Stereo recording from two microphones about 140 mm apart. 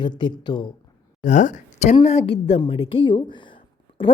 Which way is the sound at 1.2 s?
60° left (ahead or behind).